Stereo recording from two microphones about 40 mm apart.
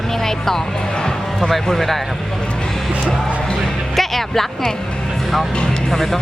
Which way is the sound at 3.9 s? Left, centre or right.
Centre.